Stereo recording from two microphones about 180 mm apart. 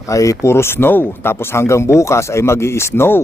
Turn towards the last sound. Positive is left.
turn(degrees=15)  # may be behind; listen again after turning